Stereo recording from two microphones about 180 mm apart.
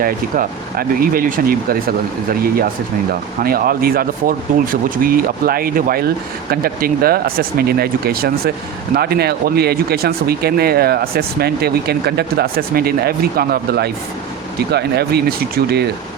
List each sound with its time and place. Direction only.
0.0 s speech: 55° right (ahead or behind)